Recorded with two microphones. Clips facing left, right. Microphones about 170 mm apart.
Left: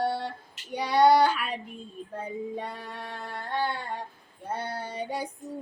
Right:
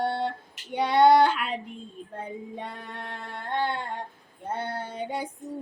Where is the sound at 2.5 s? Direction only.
20° right (ahead or behind).